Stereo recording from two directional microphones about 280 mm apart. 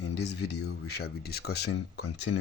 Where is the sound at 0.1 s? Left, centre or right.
Left.